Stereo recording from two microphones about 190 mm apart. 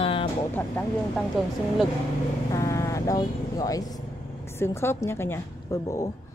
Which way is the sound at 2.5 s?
15° left (ahead or behind).